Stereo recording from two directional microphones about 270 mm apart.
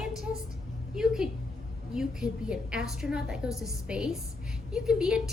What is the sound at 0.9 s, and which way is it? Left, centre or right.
A woman's voice, centre.